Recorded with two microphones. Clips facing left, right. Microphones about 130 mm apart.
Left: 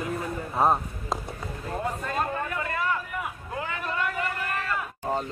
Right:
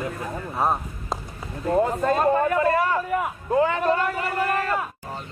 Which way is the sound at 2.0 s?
40° right (ahead or behind).